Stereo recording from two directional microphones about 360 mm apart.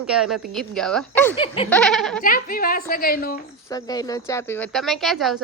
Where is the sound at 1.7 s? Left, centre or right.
Centre.